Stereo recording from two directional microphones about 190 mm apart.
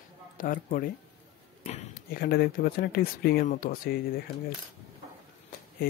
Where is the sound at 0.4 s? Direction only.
45° left (ahead or behind).